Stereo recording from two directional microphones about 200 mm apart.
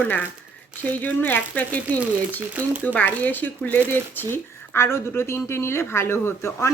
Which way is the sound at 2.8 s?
10° left (ahead or behind).